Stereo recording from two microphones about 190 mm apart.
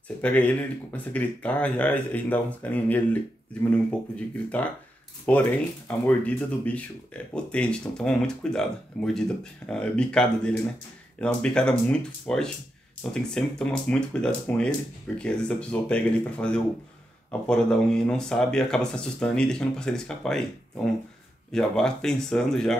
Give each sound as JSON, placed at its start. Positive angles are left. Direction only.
{"t": 0.2, "sound": "speech", "side_deg": 10}
{"t": 5.3, "sound": "speech", "side_deg": 5}